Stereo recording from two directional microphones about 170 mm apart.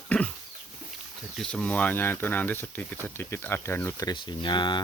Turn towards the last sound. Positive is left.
turn(degrees=25)  # may be behind; listen again after turning